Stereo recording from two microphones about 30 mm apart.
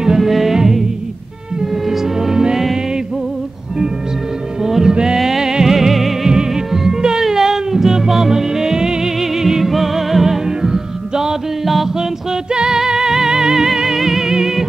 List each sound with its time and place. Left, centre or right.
0.2 s music: centre
1.9 s music: centre
4.6 s music: centre
5.8 s music: centre
6.2 s music: centre
10.6 s music: centre
11.6 s music: centre
12.5 s music: centre